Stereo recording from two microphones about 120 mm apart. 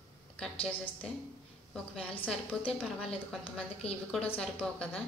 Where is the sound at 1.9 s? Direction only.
10° left (ahead or behind).